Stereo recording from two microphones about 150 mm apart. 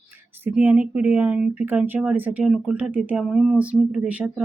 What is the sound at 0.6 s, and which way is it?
Speech, 10° right (ahead or behind).